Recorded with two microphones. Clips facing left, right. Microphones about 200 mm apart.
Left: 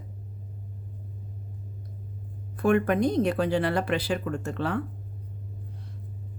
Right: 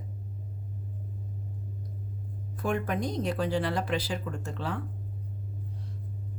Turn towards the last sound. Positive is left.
turn(degrees=60)  # may be behind; listen again after turning